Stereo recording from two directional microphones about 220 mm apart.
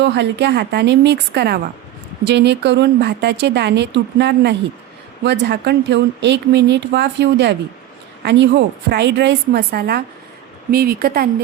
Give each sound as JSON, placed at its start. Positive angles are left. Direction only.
{"t": 0.0, "sound": "speech", "side_deg": -50}